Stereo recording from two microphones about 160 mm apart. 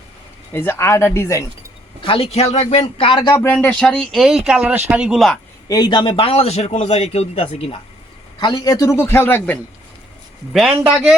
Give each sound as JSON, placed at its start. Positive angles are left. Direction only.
{"t": 0.5, "sound": "a man's voice", "side_deg": 15}
{"t": 2.0, "sound": "a man's voice", "side_deg": 35}
{"t": 3.4, "sound": "speech", "side_deg": 10}
{"t": 5.6, "sound": "a man's voice", "side_deg": 25}
{"t": 8.4, "sound": "a man's voice", "side_deg": 25}